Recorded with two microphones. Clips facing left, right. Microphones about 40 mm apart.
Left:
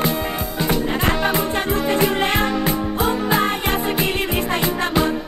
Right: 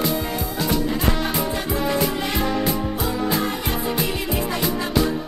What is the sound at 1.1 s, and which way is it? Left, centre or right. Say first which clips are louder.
Music: left 4 dB; left.